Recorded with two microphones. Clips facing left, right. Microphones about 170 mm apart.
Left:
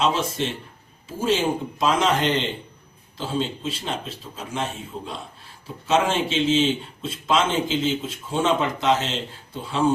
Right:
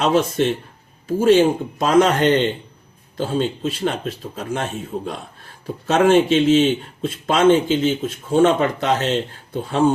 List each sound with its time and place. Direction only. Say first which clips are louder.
0.0 s a man's voice: right 6 dB; 60° right (ahead or behind)